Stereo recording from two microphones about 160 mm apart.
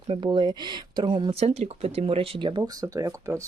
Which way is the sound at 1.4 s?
40° right (ahead or behind).